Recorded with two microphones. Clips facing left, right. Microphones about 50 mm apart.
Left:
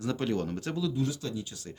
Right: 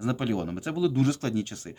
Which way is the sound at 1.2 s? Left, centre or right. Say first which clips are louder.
Right 7 dB; right.